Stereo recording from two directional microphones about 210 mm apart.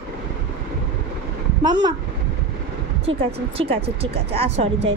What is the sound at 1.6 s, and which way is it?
Speech, 20° right (ahead or behind).